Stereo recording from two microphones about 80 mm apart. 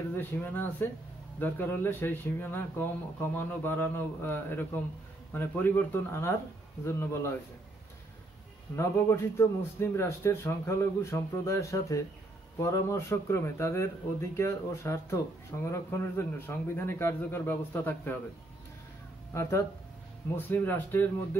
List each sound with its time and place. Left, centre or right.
0.1 s a man's voice: left
8.7 s a man's voice: left
20.3 s speech: left